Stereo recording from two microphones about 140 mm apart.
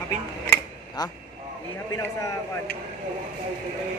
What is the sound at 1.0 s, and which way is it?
Speech, 30° left (ahead or behind).